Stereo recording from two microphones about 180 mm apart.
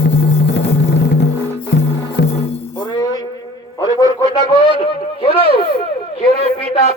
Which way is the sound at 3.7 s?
20° left (ahead or behind).